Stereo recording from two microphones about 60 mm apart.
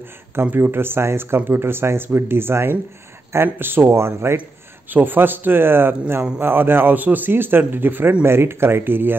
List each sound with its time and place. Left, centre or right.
0.4 s a man's voice: right
4.9 s a man's voice: right